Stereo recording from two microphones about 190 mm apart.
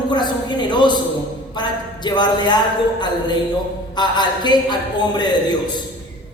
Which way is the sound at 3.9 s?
25° left (ahead or behind).